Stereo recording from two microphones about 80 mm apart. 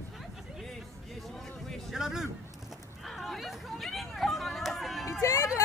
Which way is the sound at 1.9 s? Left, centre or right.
Centre.